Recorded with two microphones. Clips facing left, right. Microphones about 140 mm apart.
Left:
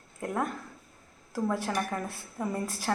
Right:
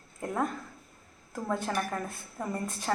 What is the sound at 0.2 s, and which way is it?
A woman's voice, 5° left (ahead or behind).